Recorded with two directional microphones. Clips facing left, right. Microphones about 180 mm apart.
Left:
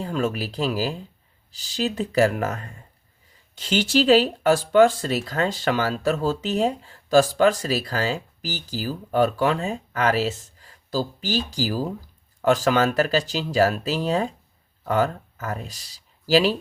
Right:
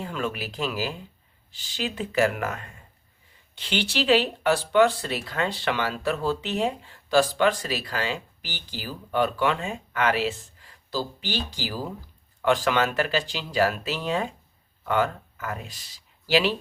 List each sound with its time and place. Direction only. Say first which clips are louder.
0.0 s speech: left 5 dB; 40° left (ahead or behind)